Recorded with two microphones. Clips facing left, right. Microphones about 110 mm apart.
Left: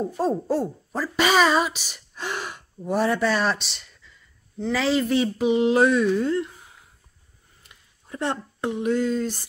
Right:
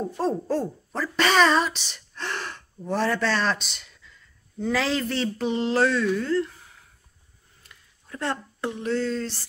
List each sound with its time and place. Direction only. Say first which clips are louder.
0.2 s speech: left 2 dB; 10° left (ahead or behind)
7.6 s speech: right 1 dB; 20° left (ahead or behind)